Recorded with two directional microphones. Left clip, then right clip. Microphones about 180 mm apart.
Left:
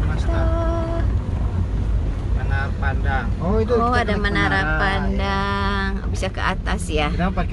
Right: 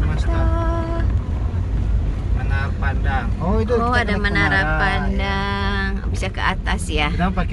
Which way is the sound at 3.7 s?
10° left (ahead or behind).